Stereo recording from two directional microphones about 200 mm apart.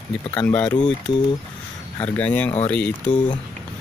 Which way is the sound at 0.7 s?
20° left (ahead or behind).